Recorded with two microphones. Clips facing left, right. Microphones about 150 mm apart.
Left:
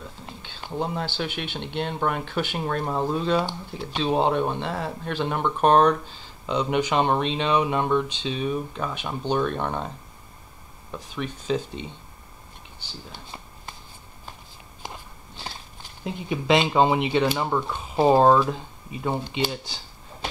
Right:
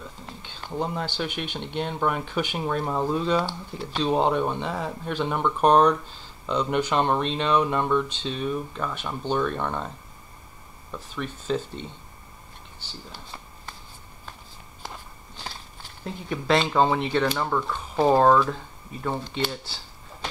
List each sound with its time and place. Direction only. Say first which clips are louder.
0.6 s speech: left 1 dB; 5° left (ahead or behind)
14.8 s biting: left 1 dB; 10° left (ahead or behind)
16.0 s speech: left 3 dB; 15° left (ahead or behind)